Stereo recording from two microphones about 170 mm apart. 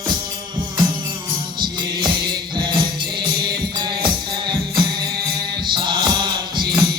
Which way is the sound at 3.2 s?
25° right (ahead or behind).